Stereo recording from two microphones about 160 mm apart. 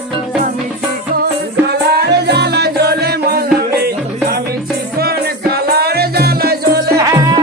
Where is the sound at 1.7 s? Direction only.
85° right.